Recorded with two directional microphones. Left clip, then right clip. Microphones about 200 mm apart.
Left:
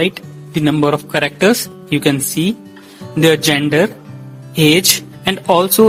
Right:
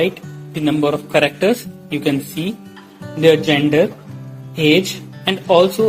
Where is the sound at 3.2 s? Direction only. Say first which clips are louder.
Even; 60° left (ahead or behind).